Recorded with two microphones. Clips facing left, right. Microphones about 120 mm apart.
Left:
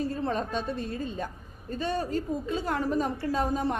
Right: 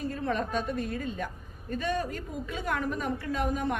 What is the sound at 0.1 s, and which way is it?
A woman's voice, 30° left (ahead or behind).